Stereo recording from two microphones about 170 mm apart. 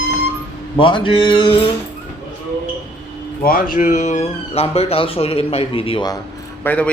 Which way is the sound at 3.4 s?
55° left (ahead or behind).